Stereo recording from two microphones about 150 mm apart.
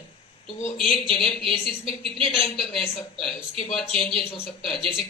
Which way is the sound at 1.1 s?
Centre (ahead or behind).